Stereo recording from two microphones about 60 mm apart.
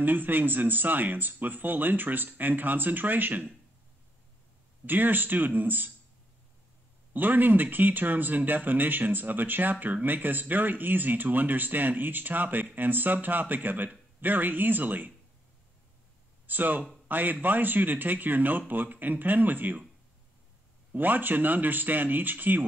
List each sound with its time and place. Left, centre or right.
0.0 s speech: right
4.8 s speech: right
7.2 s speech: right
16.4 s speech: right
20.9 s speech: right